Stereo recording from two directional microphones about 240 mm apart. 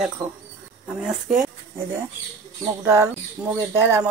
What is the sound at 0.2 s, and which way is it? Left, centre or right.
Speech, centre.